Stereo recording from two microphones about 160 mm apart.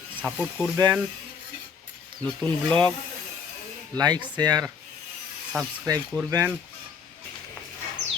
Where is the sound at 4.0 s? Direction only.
25° right (ahead or behind).